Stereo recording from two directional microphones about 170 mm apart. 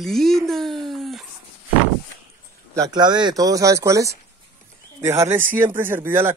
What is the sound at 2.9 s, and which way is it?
Speech, 25° right (ahead or behind).